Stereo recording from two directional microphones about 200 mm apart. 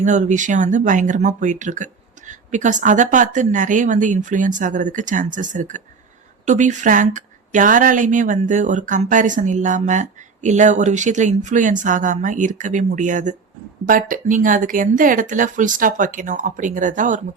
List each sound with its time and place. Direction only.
0.0 s a woman's voice: 35° right (ahead or behind)